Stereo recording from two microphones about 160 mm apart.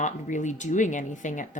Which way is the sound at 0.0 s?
50° left (ahead or behind).